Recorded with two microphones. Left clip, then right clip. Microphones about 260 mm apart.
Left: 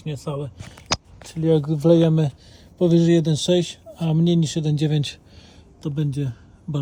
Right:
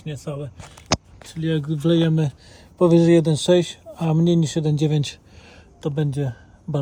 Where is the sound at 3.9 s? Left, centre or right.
Right.